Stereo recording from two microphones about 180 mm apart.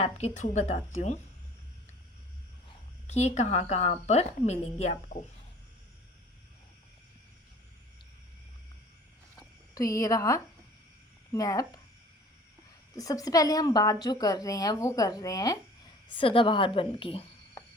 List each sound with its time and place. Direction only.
0.0 s speech: 35° left (ahead or behind)
3.1 s speech: 40° left (ahead or behind)
9.7 s a woman's voice: 20° left (ahead or behind)
13.0 s a woman's voice: 20° left (ahead or behind)